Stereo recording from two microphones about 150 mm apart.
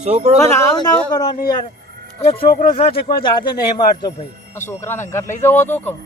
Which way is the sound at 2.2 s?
40° left (ahead or behind).